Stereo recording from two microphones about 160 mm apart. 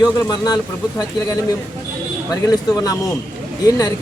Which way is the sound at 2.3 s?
25° left (ahead or behind).